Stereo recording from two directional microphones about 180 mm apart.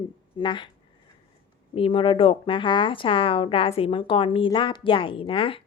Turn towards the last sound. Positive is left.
turn(degrees=30)  # may be behind; listen again after turning